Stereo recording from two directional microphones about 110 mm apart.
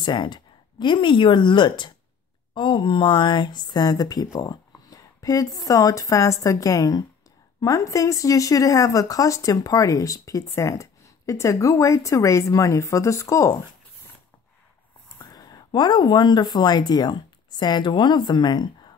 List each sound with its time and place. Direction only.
0.0 s a woman's voice: 45° left (ahead or behind); by 13.6 s 25° left (ahead or behind)
15.1 s speech: 35° left (ahead or behind)